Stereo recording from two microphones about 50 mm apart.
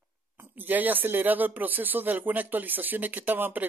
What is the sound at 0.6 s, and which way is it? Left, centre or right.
Speech, right.